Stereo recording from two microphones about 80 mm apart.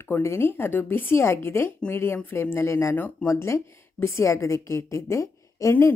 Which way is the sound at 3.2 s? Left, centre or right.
Left.